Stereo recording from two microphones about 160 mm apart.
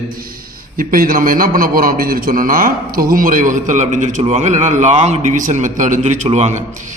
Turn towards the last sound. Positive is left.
turn(degrees=-45)  # may be behind; listen again after turning